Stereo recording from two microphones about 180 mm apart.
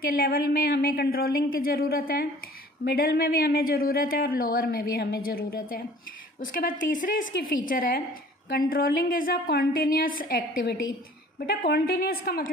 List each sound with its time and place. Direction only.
0.0 s a woman's voice: 55° left (ahead or behind)